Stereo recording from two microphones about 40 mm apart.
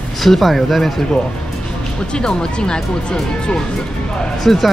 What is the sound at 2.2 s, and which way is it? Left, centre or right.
Speech, left.